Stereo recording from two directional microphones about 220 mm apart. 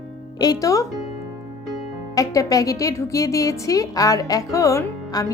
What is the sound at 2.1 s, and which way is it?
A woman's voice, 15° left (ahead or behind).